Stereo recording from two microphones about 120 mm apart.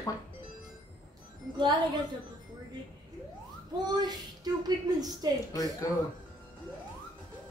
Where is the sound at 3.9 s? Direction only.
35° right (ahead or behind).